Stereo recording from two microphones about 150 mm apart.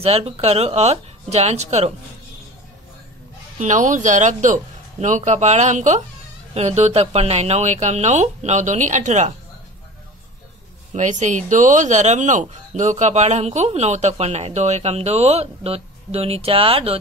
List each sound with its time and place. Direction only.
0.0 s speech: 45° right (ahead or behind)
3.5 s speech: 55° right (ahead or behind)
10.9 s speech: 55° right (ahead or behind)